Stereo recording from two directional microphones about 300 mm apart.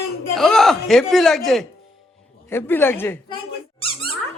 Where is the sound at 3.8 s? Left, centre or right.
Centre.